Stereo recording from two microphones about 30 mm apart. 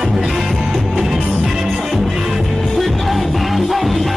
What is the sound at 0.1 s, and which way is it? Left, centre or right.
Music, centre.